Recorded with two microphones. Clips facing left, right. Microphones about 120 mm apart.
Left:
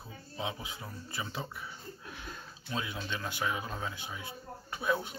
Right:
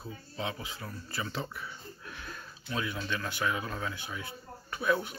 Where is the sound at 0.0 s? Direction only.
15° left (ahead or behind).